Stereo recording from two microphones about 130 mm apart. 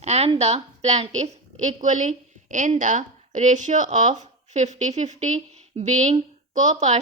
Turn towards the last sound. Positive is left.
turn(degrees=-65)  # may be behind; listen again after turning